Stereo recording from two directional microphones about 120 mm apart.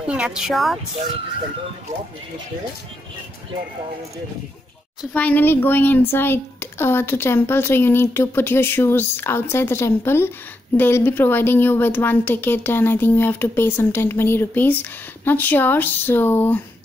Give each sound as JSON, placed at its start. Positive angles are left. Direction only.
{"t": 0.0, "sound": "speech", "side_deg": -10}
{"t": 5.1, "sound": "a woman's voice", "side_deg": 15}